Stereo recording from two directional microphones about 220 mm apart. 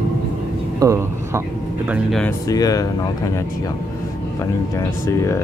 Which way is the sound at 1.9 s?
Centre (ahead or behind).